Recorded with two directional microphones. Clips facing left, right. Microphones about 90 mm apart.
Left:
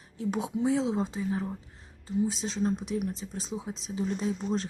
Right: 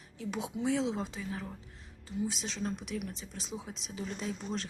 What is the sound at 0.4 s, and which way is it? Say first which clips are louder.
Speech: left 3 dB; 30° left (ahead or behind).